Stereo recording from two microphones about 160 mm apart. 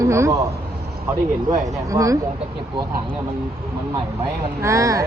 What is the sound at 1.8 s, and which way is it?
Speech, 20° right (ahead or behind).